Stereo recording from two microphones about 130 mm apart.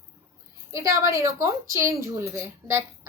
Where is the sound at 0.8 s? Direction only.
25° right (ahead or behind).